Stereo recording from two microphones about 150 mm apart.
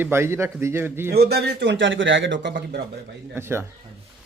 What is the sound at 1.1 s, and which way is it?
Speech, 90° right.